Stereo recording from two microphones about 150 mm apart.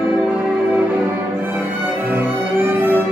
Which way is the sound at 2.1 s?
15° right (ahead or behind).